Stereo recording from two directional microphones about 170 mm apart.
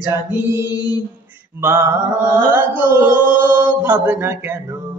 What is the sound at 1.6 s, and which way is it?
A man's voice, 15° right (ahead or behind).